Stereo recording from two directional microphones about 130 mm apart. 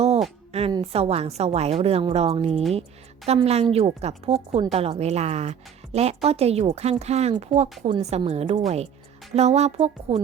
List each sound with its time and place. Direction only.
0.5 s a sound: 55° right (ahead or behind)
0.9 s speech: 50° right (ahead or behind)
7.0 s music: 55° right (ahead or behind)